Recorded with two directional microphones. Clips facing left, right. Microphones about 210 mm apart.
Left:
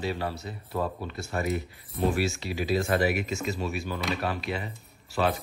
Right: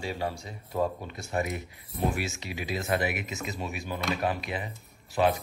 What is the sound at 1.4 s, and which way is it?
Speech, centre (ahead or behind).